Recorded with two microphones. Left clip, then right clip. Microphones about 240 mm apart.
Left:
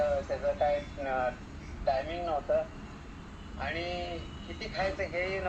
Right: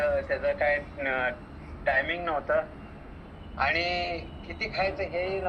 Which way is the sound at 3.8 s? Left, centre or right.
Right.